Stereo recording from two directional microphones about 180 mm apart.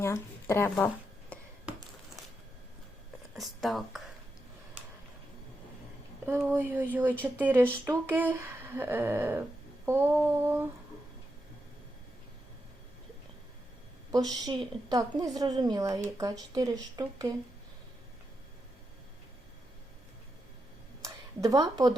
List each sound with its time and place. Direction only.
0.0 s speech: 15° left (ahead or behind)
1.3 s a sound: 5° left (ahead or behind)
3.3 s speech: centre (ahead or behind)
6.2 s speech: 10° right (ahead or behind)
14.1 s speech: 20° right (ahead or behind)
21.0 s a sound: 20° right (ahead or behind)